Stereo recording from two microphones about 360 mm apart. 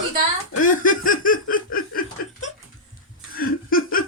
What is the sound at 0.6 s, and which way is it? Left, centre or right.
Laughter, left.